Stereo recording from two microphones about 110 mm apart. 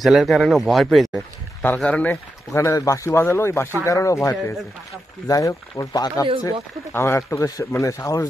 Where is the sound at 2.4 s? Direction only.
30° left (ahead or behind).